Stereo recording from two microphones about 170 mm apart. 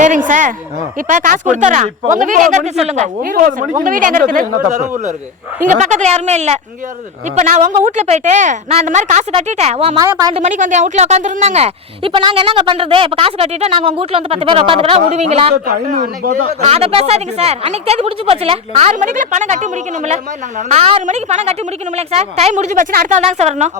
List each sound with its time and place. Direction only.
0.0 s a woman's voice: 50° right (ahead or behind)
10.0 s speech: 20° right (ahead or behind)
10.3 s speech: 45° right (ahead or behind)
15.5 s a woman's voice: 60° right (ahead or behind)
16.6 s speech: 35° right (ahead or behind)